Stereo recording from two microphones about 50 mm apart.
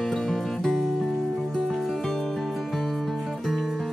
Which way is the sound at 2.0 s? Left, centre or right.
Centre.